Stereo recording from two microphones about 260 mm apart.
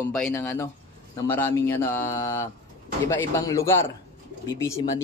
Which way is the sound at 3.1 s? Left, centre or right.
Centre.